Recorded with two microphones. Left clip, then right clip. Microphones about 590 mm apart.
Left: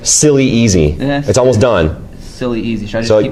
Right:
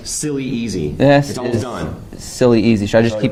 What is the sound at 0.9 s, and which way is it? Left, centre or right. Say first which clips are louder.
Speech: right 5 dB; right.